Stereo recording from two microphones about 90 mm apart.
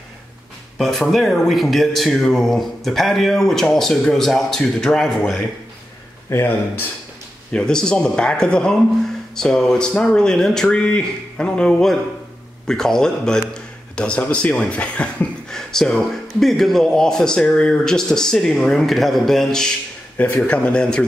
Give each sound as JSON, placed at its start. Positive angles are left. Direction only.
{"t": 0.7, "sound": "speech", "side_deg": 0}
{"t": 6.3, "sound": "speech", "side_deg": 25}
{"t": 7.5, "sound": "a man's voice", "side_deg": 10}
{"t": 20.2, "sound": "a man's voice", "side_deg": 20}